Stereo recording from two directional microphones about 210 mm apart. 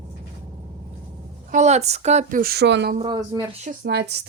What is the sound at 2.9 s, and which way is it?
Speech, 20° right (ahead or behind).